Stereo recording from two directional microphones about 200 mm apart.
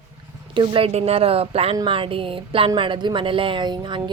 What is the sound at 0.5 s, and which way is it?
A woman's voice, 25° right (ahead or behind).